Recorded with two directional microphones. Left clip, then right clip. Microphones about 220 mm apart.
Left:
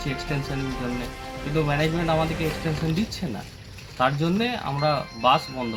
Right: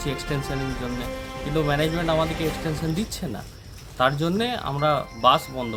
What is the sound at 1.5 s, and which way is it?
Speech, 20° right (ahead or behind).